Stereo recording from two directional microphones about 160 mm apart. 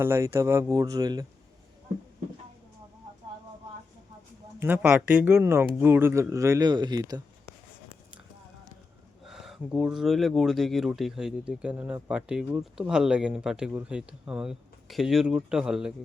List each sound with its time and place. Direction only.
0.0 s speech: 15° right (ahead or behind)
4.6 s speech: 10° right (ahead or behind)
9.2 s speech: centre (ahead or behind)